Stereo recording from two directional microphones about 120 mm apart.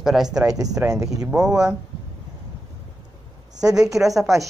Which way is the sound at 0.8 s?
15° right (ahead or behind).